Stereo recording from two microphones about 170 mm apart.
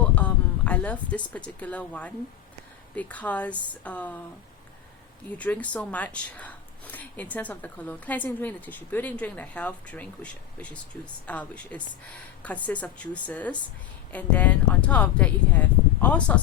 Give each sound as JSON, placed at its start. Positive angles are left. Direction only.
{"t": 0.0, "sound": "speech", "side_deg": 10}
{"t": 5.4, "sound": "speech", "side_deg": 10}